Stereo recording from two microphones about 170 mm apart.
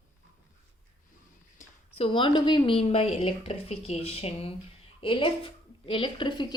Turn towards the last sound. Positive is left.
turn(degrees=25)  # may be behind; listen again after turning